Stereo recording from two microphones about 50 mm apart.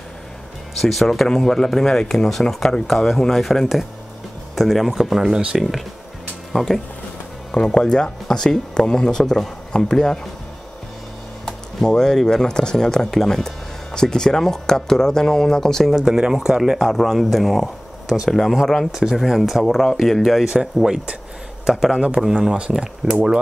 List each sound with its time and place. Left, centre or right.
0.7 s speech: centre
7.5 s speech: centre
11.4 s speech: centre
15.9 s speech: centre
16.7 s speech: centre
18.9 s speech: centre